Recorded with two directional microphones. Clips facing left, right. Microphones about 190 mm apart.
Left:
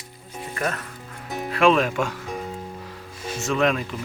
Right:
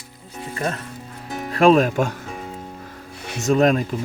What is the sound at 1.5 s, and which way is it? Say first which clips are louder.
Speech: right 4 dB; 40° right (ahead or behind).